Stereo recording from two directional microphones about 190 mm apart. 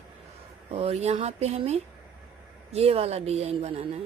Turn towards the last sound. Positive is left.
turn(degrees=-30)  # may be behind; listen again after turning